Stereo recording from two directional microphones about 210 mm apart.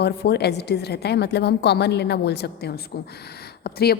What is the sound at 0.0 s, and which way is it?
A woman's voice, 50° left (ahead or behind).